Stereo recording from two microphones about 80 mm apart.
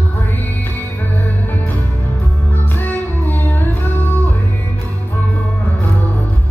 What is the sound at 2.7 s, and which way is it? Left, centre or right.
Music, left.